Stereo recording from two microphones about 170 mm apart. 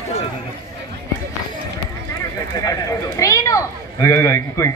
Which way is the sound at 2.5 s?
20° left (ahead or behind).